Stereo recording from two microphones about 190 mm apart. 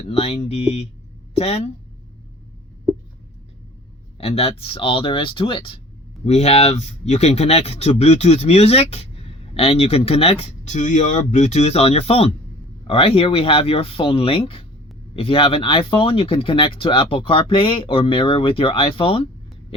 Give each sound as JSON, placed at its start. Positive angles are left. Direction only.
{"t": 0.1, "sound": "speech", "side_deg": 30}
{"t": 4.2, "sound": "speech", "side_deg": 30}